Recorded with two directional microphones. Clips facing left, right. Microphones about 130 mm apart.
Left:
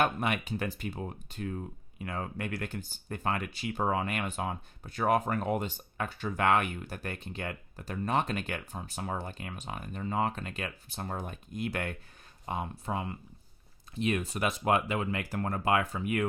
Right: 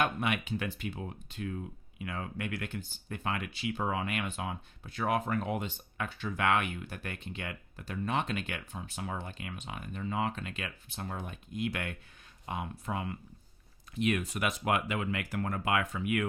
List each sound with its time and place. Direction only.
0.0 s speech: 40° left (ahead or behind)